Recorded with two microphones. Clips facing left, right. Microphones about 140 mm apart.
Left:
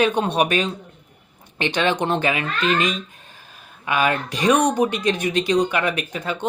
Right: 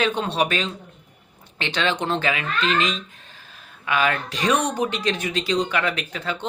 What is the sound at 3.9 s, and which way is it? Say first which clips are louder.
Speech: left 2 dB; 15° left (ahead or behind).